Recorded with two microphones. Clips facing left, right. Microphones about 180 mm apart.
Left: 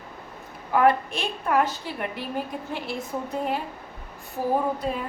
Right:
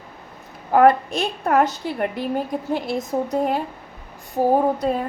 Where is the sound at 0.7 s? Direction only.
45° right (ahead or behind).